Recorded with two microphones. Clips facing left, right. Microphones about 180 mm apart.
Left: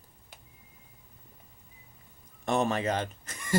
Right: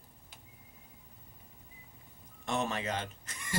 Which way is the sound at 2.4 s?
45° left (ahead or behind).